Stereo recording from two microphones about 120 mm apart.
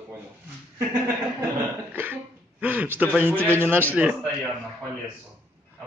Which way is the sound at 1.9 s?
15° right (ahead or behind).